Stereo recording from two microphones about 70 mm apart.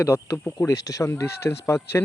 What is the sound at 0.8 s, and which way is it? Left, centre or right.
Speech, left.